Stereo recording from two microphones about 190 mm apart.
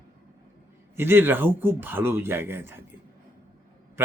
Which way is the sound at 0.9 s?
10° right (ahead or behind).